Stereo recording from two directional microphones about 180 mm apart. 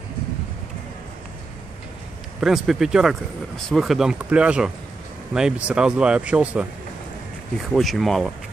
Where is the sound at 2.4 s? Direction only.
Centre (ahead or behind).